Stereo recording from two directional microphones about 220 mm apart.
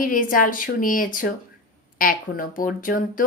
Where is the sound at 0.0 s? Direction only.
40° left (ahead or behind).